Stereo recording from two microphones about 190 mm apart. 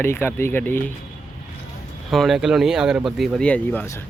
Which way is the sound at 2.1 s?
Centre (ahead or behind).